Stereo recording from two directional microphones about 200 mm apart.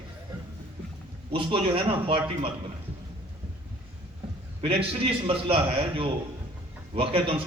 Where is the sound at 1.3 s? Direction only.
25° right (ahead or behind).